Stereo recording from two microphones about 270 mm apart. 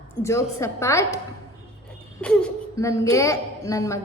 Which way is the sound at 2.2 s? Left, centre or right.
Centre.